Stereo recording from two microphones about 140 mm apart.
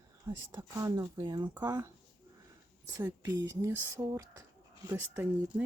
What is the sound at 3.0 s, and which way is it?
Speech, 15° right (ahead or behind).